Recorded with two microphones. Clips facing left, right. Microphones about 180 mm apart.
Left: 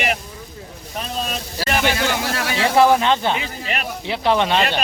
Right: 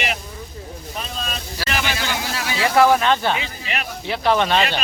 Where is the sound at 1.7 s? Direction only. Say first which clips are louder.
Left 5 dB; 55° left (ahead or behind).